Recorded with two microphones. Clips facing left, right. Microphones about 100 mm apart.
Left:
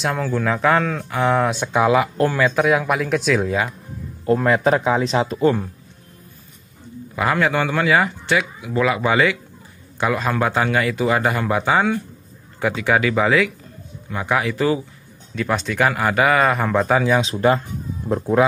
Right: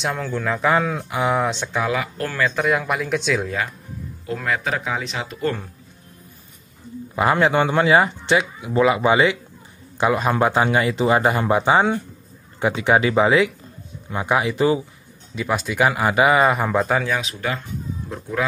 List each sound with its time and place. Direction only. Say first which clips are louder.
0.0 s speech: left 3 dB; centre (ahead or behind)
1.5 s speech: left 6 dB; 15° left (ahead or behind)
2.4 s speech: even; 5° left (ahead or behind)
4.3 s speech: left 8 dB; 35° left (ahead or behind)
5.4 s speech: left 5 dB; 15° left (ahead or behind)
7.2 s a man's voice: right 2 dB; 25° right (ahead or behind); by 17.0 s 5° right (ahead or behind)
17.2 s speech: left 9 dB; 35° left (ahead or behind)
18.0 s speech: left 10 dB; 55° left (ahead or behind)